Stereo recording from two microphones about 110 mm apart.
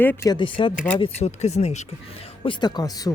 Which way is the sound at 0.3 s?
45° left (ahead or behind).